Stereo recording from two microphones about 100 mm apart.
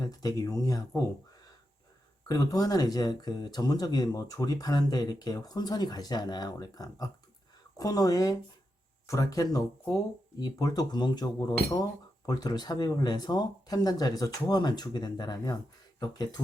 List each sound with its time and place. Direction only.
0.0 s speech: 40° left (ahead or behind)
2.2 s speech: 35° left (ahead or behind)